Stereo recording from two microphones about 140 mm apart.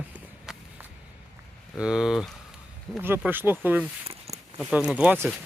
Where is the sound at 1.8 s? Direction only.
5° right (ahead or behind).